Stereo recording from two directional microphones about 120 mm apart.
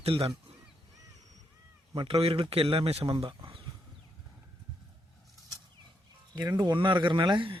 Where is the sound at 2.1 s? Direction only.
50° right (ahead or behind).